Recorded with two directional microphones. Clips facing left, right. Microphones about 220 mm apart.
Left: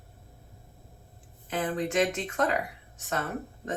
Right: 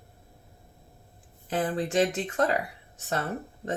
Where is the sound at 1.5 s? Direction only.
35° right (ahead or behind).